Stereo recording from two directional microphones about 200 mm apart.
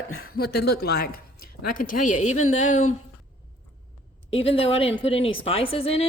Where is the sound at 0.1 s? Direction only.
90° left.